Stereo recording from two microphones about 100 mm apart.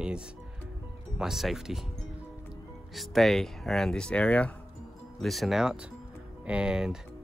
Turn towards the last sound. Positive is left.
turn(degrees=-10)  # may be behind; listen again after turning